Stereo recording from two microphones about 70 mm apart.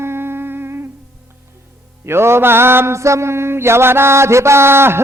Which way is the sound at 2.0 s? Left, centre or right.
Right.